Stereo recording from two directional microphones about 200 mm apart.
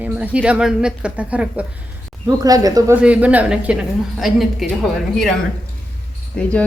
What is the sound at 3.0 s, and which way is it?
A woman's voice, 5° right (ahead or behind).